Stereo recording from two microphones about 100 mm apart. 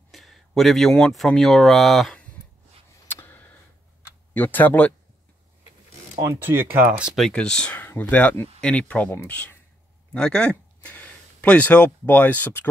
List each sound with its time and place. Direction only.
0.1 s speech: centre (ahead or behind)
3.1 s a sound: 20° left (ahead or behind)
4.3 s speech: 20° left (ahead or behind)
6.2 s speech: 20° right (ahead or behind)
7.2 s speech: 5° left (ahead or behind)